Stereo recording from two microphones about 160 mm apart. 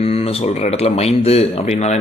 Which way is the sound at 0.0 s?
40° left (ahead or behind).